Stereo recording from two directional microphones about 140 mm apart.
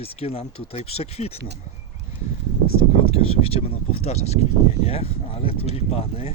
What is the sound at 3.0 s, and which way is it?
Speech, 45° left (ahead or behind).